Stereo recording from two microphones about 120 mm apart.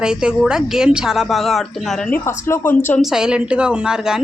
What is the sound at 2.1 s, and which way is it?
Speech, 15° left (ahead or behind).